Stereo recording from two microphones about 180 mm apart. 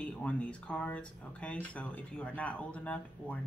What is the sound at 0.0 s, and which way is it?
Speech, 5° left (ahead or behind).